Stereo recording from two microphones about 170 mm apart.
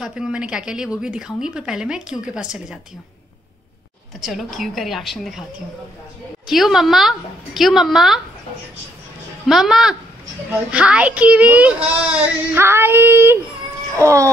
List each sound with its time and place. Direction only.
0.0 s a woman's voice: 5° right (ahead or behind)
4.2 s a woman's voice: centre (ahead or behind)
6.4 s a woman's voice: centre (ahead or behind)
9.5 s a woman's voice: 5° right (ahead or behind)